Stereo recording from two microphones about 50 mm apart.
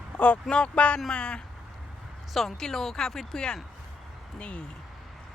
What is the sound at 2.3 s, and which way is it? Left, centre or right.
Speech, centre.